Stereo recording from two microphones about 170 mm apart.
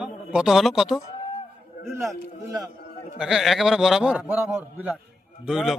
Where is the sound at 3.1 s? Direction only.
5° right (ahead or behind).